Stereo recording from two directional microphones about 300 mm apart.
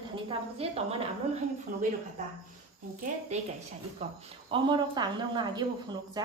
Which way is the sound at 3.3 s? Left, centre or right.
Right.